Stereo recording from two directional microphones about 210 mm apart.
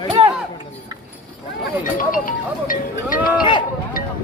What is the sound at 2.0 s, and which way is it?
Speech, 40° left (ahead or behind).